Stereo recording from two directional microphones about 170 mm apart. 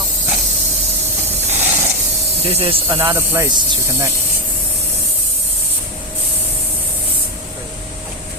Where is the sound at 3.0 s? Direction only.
15° right (ahead or behind).